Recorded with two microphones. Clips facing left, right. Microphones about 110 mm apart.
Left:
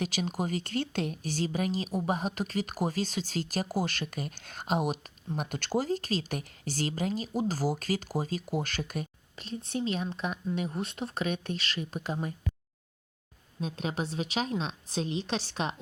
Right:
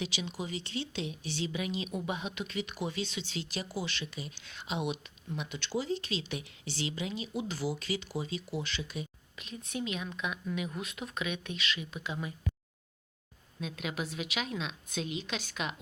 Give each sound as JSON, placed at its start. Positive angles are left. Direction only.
{"t": 0.0, "sound": "speech", "side_deg": 45}
{"t": 9.3, "sound": "speech", "side_deg": 35}
{"t": 13.6, "sound": "speech", "side_deg": 35}